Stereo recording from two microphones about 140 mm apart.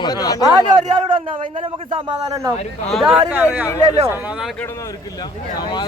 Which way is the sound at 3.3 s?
15° right (ahead or behind).